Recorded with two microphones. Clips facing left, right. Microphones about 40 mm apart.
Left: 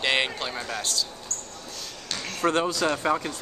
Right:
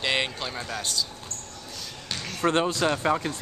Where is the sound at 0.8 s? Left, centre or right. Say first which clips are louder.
Right 1 dB; centre.